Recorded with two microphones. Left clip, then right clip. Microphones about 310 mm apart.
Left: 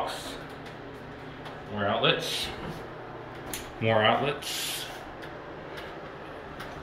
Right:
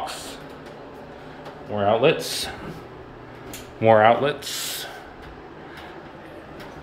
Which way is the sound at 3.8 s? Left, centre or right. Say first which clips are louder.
Right 8 dB; centre.